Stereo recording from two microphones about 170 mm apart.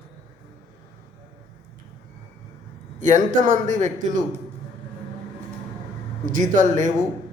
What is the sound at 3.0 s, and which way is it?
Speech, 50° right (ahead or behind).